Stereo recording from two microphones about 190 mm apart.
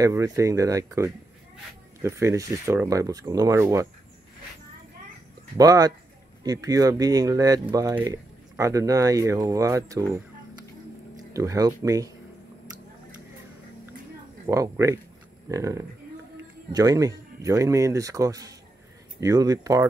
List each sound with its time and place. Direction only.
0.0 s speech: 15° right (ahead or behind)
5.6 s speech: 20° right (ahead or behind)
11.3 s speech: 20° right (ahead or behind)
14.4 s speech: 15° right (ahead or behind)